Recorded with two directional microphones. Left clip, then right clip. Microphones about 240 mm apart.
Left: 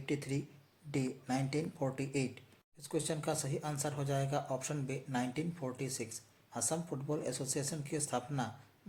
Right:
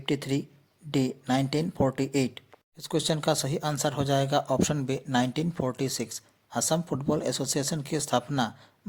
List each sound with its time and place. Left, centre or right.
0.0 s speech: right